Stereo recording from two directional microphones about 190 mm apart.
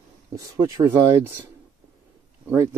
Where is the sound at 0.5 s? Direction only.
15° right (ahead or behind).